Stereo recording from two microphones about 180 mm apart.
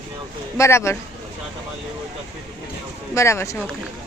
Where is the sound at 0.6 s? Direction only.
15° left (ahead or behind).